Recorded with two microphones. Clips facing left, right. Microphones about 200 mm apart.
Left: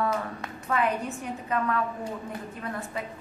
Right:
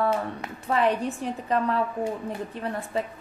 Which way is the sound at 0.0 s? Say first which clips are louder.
Right 3 dB; 30° right (ahead or behind).